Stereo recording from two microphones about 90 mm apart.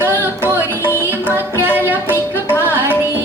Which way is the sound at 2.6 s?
25° right (ahead or behind).